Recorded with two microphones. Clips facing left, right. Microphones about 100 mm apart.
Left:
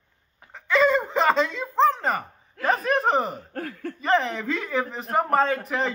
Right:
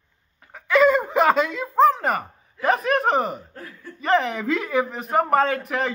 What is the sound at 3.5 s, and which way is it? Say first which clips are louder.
Speech: left 7 dB; 70° left (ahead or behind).